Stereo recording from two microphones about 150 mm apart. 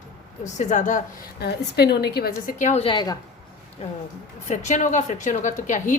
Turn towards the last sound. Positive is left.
turn(degrees=55)  # may be behind; listen again after turning